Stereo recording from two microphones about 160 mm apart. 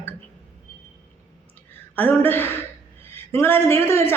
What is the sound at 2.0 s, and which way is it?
A woman's voice, 15° left (ahead or behind).